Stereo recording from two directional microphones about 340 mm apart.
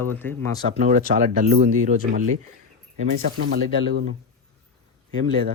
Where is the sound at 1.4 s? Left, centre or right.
Right.